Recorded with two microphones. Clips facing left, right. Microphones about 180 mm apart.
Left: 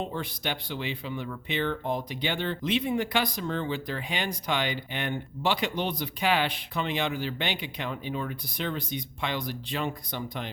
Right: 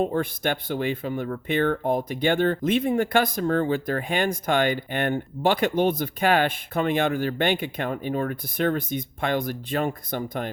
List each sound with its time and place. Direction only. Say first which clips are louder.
0.0 s speech: right 9 dB; 50° right (ahead or behind)